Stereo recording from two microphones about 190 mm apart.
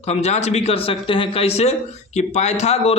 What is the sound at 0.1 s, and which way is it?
Speech, 35° left (ahead or behind).